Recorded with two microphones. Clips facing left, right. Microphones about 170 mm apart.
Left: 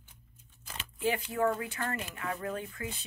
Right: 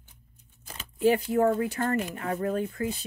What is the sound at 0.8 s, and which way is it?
Speech, 40° right (ahead or behind).